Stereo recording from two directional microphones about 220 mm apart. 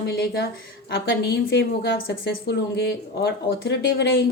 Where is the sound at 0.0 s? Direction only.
50° left (ahead or behind).